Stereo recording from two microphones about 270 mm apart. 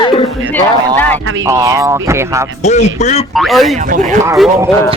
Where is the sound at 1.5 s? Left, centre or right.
Centre.